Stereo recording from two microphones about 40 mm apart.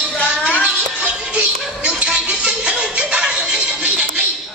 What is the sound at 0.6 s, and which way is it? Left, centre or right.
Music, right.